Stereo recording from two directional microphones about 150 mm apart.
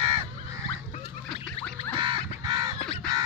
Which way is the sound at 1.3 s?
5° left (ahead or behind).